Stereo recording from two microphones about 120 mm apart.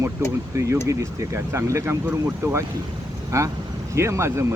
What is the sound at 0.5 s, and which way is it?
Speech, 25° right (ahead or behind).